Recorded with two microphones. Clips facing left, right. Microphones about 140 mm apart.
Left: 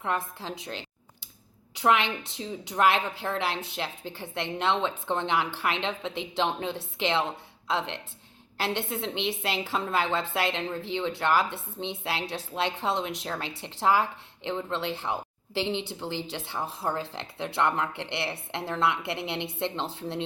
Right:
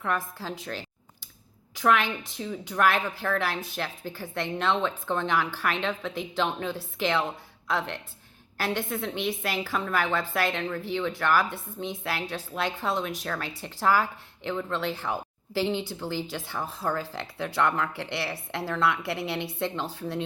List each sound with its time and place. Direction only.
0.0 s speech: 25° left (ahead or behind)
1.8 s speech: 25° left (ahead or behind)